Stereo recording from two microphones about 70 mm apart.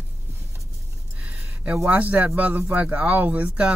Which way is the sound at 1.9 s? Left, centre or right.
Right.